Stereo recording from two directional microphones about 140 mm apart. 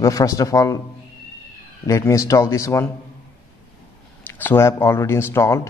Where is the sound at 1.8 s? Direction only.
20° left (ahead or behind).